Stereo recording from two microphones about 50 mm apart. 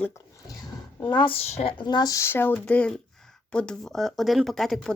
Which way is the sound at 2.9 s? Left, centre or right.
Centre.